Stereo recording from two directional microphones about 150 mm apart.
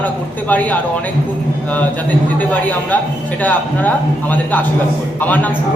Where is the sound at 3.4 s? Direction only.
10° left (ahead or behind).